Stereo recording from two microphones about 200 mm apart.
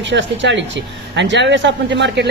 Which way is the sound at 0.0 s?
65° right (ahead or behind).